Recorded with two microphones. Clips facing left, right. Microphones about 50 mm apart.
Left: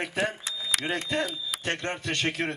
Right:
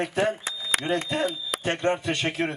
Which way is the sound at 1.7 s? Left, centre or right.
Centre.